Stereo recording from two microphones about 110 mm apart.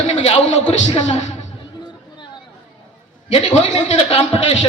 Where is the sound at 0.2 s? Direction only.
70° left (ahead or behind).